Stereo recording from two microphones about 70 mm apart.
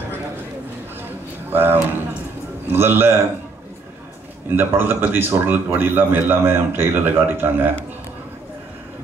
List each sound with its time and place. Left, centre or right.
1.5 s a man's voice: right
4.5 s a man's voice: right